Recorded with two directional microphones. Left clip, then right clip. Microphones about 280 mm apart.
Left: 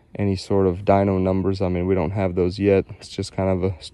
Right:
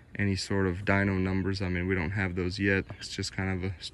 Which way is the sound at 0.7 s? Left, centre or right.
Centre.